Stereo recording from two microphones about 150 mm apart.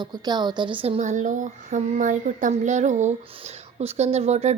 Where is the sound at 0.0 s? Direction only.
30° right (ahead or behind).